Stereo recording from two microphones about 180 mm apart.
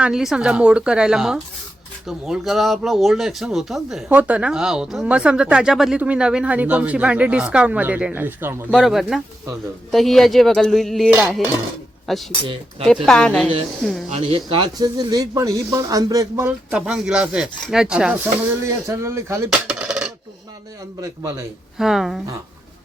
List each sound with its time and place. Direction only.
0.0 s speech: 5° right (ahead or behind)
8.7 s speech: centre (ahead or behind)
11.1 s speech: 10° right (ahead or behind)
12.1 s speech: centre (ahead or behind)
14.1 s speech: 35° right (ahead or behind); by 18.2 s 5° right (ahead or behind)
18.6 s speech: 15° right (ahead or behind)
19.5 s coin: 5° right (ahead or behind)
21.0 s speech: 20° right (ahead or behind)
21.8 s speech: centre (ahead or behind)